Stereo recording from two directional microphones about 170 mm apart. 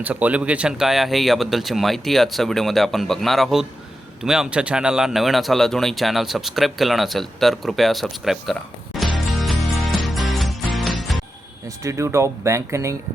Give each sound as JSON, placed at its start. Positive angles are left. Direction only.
{"t": 0.0, "sound": "speech", "side_deg": -10}
{"t": 9.1, "sound": "music", "side_deg": 0}
{"t": 11.8, "sound": "speech", "side_deg": -15}